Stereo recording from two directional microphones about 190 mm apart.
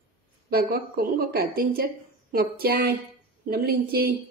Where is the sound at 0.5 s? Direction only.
50° right (ahead or behind).